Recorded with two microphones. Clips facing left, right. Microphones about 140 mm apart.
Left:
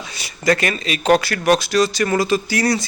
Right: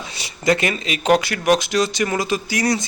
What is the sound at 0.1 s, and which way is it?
Speech, 25° right (ahead or behind).